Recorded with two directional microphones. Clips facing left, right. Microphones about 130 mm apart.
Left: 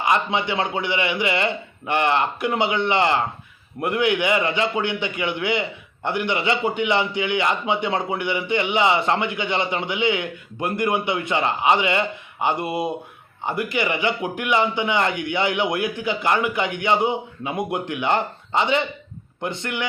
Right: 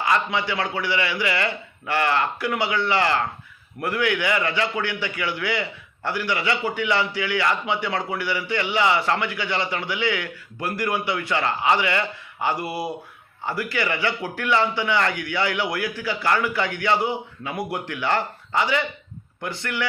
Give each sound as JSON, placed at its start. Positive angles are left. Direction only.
{"t": 0.0, "sound": "a man's voice", "side_deg": 20}